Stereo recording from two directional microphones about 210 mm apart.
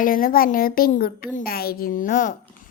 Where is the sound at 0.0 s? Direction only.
40° left (ahead or behind).